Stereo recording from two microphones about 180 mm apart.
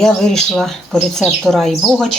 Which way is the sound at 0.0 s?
Centre (ahead or behind).